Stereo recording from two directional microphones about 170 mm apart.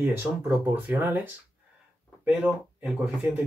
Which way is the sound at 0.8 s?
10° right (ahead or behind).